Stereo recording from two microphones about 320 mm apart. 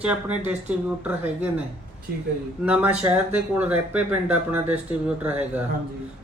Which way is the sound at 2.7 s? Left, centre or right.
Centre.